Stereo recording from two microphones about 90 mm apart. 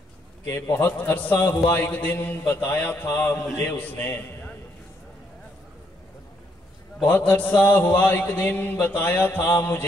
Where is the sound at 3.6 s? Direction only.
20° left (ahead or behind).